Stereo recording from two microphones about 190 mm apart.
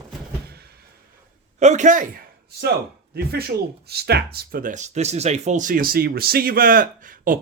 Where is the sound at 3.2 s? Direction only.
55° right (ahead or behind).